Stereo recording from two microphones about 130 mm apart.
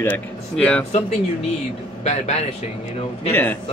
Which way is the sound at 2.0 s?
60° left (ahead or behind).